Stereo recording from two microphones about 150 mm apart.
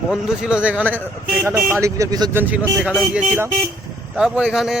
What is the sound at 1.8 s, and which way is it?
Speech, 25° right (ahead or behind).